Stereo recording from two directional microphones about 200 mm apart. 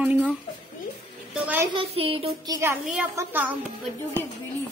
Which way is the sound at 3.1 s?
10° right (ahead or behind).